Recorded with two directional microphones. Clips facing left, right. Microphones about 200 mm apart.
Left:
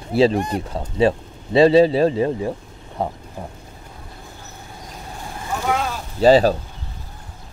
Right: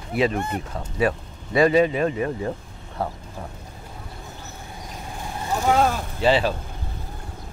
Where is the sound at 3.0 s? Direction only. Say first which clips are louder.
Left 3 dB; 20° left (ahead or behind).